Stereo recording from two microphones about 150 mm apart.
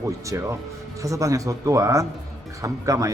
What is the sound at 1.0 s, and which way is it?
Speech, 20° right (ahead or behind).